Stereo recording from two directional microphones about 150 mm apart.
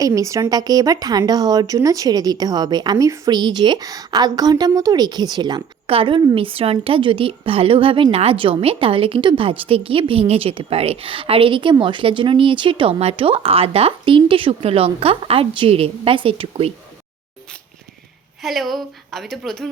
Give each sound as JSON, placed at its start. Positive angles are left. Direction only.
{"t": 0.0, "sound": "a woman's voice", "side_deg": -20}
{"t": 18.4, "sound": "a woman's voice", "side_deg": 0}